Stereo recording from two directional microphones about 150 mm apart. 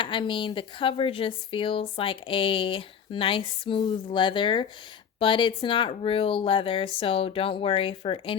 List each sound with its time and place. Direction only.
0.0 s speech: 35° left (ahead or behind)